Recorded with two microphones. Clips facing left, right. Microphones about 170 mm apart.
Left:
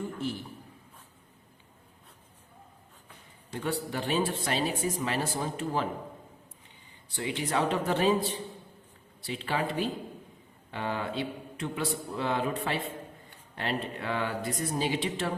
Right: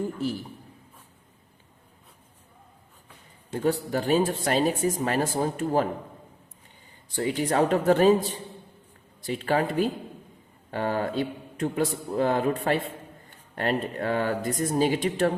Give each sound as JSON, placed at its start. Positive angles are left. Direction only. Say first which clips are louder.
{"t": 3.6, "sound": "speech", "louder": "right 7 dB", "side_deg": -40}
{"t": 7.2, "sound": "speech", "louder": "right 6 dB", "side_deg": -45}
{"t": 10.7, "sound": "speech", "louder": "right 6 dB", "side_deg": -45}